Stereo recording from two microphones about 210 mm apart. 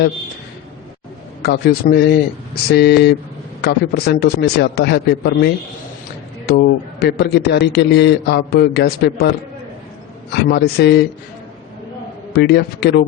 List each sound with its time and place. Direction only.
1.4 s a man's voice: 50° left (ahead or behind)
10.3 s a man's voice: 50° left (ahead or behind)
12.3 s a man's voice: 50° left (ahead or behind)